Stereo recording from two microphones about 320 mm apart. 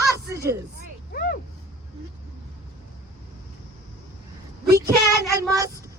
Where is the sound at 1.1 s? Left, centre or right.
Left.